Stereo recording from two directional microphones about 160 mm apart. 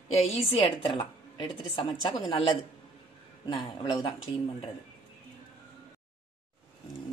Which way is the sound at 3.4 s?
30° left (ahead or behind).